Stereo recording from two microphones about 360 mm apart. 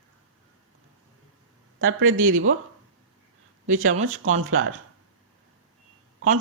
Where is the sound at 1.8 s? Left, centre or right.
Right.